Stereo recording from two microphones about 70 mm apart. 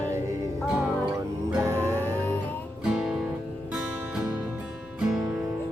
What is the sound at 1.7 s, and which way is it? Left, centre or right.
Music, right.